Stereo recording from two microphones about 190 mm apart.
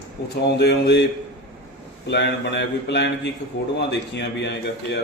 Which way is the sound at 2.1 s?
60° left (ahead or behind).